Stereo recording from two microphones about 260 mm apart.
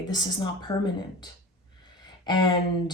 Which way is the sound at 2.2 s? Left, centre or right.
Centre.